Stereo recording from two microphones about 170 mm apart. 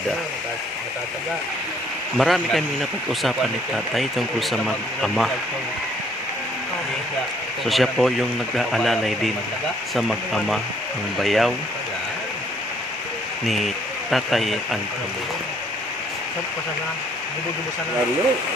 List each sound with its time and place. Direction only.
2.1 s speech: centre (ahead or behind)
7.6 s speech: centre (ahead or behind)
14.1 s speech: centre (ahead or behind)